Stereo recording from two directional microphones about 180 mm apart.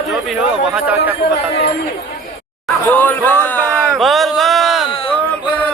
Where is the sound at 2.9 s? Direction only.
10° left (ahead or behind).